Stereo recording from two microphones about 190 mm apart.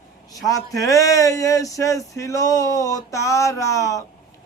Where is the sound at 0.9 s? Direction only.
15° left (ahead or behind).